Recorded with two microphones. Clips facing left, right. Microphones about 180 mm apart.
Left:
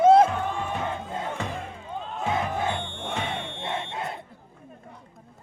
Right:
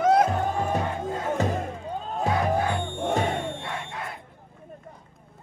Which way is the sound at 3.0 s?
45° right (ahead or behind).